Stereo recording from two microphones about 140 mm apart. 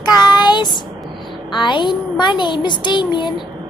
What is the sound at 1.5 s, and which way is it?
A child's voice, 35° left (ahead or behind).